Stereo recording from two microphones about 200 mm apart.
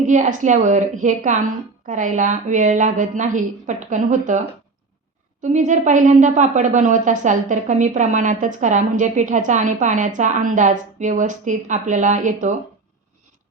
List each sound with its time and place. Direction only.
0.0 s a woman's voice: 40° right (ahead or behind)